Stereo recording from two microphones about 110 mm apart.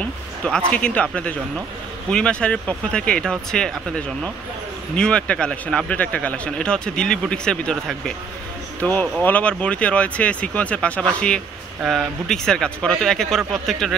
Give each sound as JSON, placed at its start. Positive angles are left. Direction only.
{"t": 0.4, "sound": "speech", "side_deg": 10}
{"t": 9.2, "sound": "speech", "side_deg": 15}
{"t": 11.8, "sound": "speech", "side_deg": 0}